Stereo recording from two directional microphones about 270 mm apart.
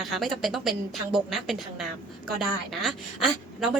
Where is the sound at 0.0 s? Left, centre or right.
Centre.